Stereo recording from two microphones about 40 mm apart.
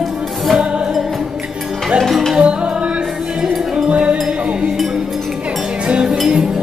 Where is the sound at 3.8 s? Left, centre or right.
Right.